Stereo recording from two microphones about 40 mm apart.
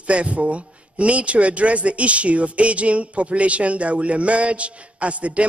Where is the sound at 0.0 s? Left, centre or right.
Right.